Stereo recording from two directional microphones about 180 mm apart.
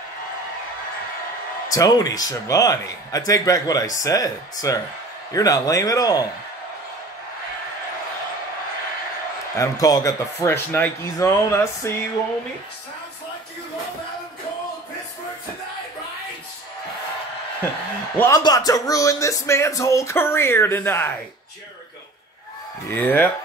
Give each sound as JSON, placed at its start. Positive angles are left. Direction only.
{"t": 1.7, "sound": "a man's voice", "side_deg": 20}
{"t": 9.6, "sound": "music", "side_deg": 20}
{"t": 18.1, "sound": "music", "side_deg": 10}
{"t": 22.8, "sound": "music", "side_deg": 10}